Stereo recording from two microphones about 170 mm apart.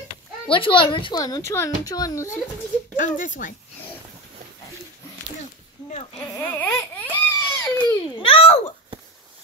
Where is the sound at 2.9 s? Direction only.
50° left (ahead or behind).